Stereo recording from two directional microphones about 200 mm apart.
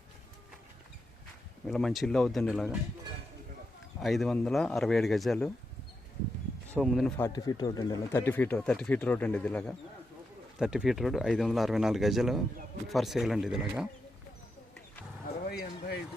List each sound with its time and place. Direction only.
1.6 s speech: centre (ahead or behind)
4.0 s speech: centre (ahead or behind)
6.7 s speech: centre (ahead or behind)
7.2 s speech: 20° left (ahead or behind); by 13.8 s centre (ahead or behind)
15.4 s a sound: 50° left (ahead or behind)